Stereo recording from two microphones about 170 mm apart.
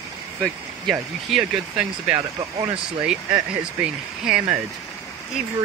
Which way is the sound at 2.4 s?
20° right (ahead or behind).